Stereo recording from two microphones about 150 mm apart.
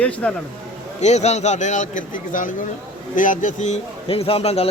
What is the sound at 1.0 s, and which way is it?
A man's voice, 50° left (ahead or behind).